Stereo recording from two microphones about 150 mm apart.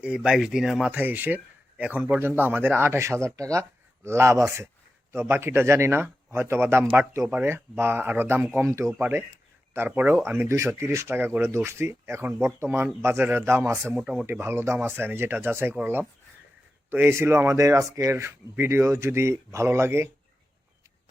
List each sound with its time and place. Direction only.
0.0 s speech: 5° right (ahead or behind)